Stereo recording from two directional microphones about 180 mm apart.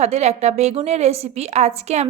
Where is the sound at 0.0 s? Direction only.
40° right (ahead or behind).